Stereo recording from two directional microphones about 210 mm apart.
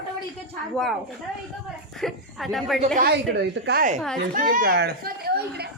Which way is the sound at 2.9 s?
50° right (ahead or behind).